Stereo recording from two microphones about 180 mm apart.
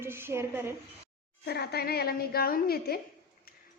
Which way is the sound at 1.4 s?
65° left (ahead or behind).